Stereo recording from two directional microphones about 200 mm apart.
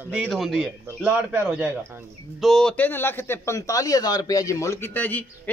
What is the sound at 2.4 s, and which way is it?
A man's voice, centre (ahead or behind).